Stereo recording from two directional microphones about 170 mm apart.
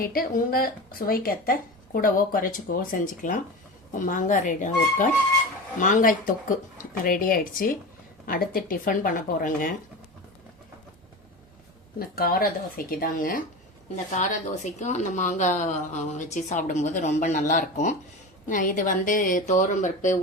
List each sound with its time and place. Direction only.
0.0 s a woman's voice: 60° left (ahead or behind)
11.9 s a woman's voice: 60° left (ahead or behind)
13.9 s a woman's voice: 45° left (ahead or behind)